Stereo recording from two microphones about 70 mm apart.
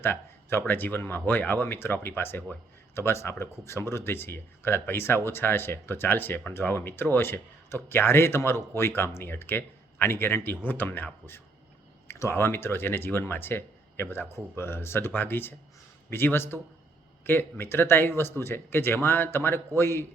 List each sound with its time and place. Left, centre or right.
0.0 s a man's voice: left